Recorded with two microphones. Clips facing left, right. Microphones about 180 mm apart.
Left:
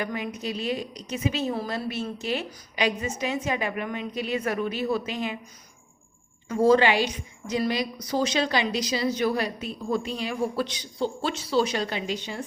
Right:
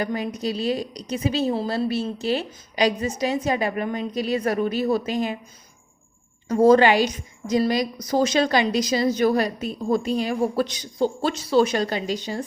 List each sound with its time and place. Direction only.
0.0 s a woman's voice: 35° right (ahead or behind)
6.5 s a woman's voice: 45° right (ahead or behind)